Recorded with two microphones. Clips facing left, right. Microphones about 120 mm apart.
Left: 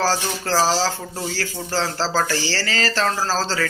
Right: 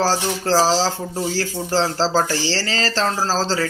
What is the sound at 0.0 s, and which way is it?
Speech, 30° right (ahead or behind).